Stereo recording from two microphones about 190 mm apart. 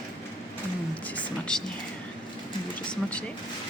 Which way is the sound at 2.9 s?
5° left (ahead or behind).